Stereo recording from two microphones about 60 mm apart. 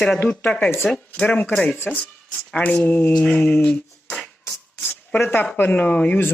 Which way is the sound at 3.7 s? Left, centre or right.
Centre.